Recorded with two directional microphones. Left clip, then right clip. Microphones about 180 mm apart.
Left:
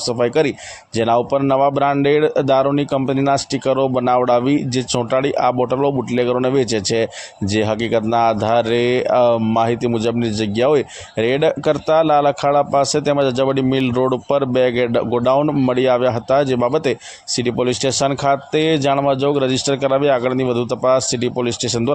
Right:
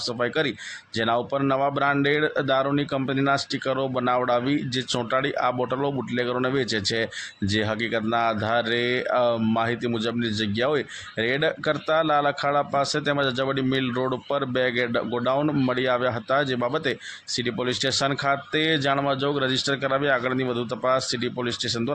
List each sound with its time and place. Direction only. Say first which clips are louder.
0.2 s speech: left 9 dB; 35° left (ahead or behind)